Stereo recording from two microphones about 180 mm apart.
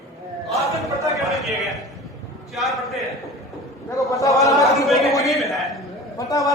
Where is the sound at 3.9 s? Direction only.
20° left (ahead or behind).